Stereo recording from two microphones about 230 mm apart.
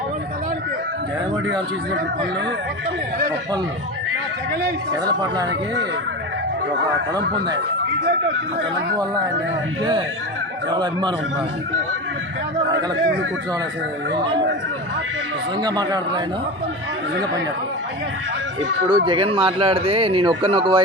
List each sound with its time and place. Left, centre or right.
4.9 s speech: centre
10.7 s speech: centre
15.6 s speech: centre
18.9 s speech: right